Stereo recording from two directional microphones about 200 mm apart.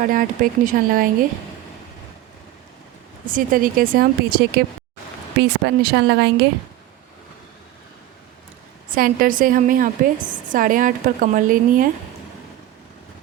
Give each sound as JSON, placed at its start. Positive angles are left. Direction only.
{"t": 0.0, "sound": "a woman's voice", "side_deg": -45}
{"t": 3.2, "sound": "a woman's voice", "side_deg": -45}
{"t": 9.0, "sound": "a woman's voice", "side_deg": -45}